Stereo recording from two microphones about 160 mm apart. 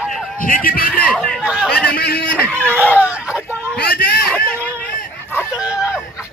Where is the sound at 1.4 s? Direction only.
5° right (ahead or behind).